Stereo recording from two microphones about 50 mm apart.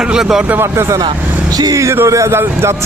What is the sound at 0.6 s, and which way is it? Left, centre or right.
Speech, right.